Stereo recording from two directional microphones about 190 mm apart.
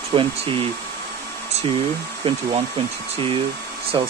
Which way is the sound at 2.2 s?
30° right (ahead or behind).